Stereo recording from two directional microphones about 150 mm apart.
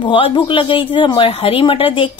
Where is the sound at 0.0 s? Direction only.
35° left (ahead or behind).